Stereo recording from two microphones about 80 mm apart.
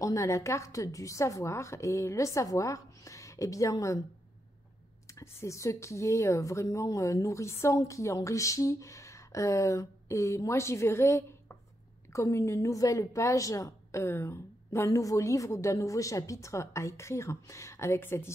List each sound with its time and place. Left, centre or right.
0.0 s speech: left
5.0 s speech: left
14.0 s speech: left